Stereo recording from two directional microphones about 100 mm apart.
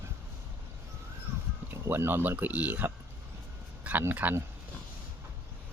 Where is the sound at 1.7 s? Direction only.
25° right (ahead or behind).